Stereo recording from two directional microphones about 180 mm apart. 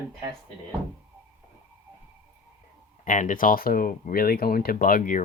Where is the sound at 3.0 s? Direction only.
50° left (ahead or behind).